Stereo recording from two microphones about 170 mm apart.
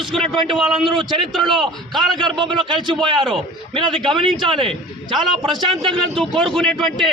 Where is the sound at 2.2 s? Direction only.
30° right (ahead or behind).